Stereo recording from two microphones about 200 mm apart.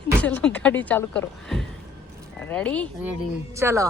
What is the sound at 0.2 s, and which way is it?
Speech, 5° left (ahead or behind).